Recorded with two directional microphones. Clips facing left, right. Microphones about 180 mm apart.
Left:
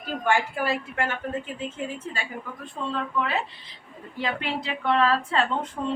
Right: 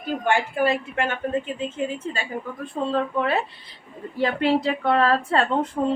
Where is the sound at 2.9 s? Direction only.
45° right (ahead or behind).